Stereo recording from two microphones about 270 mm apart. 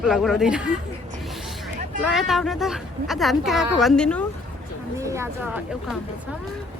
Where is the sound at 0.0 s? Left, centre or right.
Centre.